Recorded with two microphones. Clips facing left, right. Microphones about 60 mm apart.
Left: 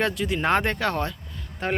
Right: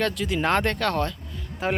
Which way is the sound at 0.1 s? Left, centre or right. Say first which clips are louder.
Left 1 dB; centre.